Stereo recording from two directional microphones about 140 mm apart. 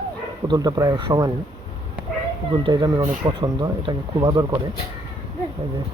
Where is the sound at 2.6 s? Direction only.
30° right (ahead or behind).